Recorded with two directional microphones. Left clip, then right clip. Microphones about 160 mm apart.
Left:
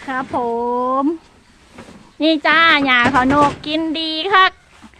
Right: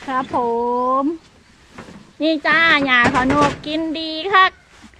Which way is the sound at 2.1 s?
25° left (ahead or behind).